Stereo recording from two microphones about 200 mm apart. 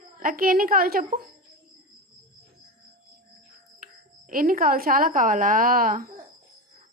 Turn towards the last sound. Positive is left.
turn(degrees=-45)  # may be behind; listen again after turning